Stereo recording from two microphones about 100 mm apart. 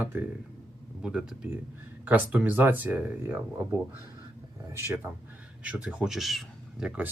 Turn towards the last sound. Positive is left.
turn(degrees=0)  # may be behind; listen again after turning